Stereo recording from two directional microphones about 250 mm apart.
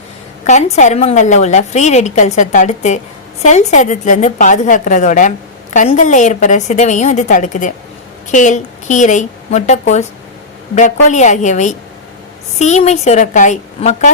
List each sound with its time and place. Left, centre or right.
0.4 s a woman's voice: left
11.1 s a woman's voice: left